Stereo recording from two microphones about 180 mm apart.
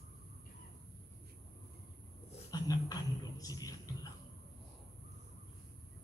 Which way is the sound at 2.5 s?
20° left (ahead or behind).